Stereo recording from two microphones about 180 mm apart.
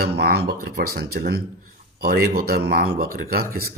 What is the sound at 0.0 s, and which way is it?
Speech, 60° right (ahead or behind).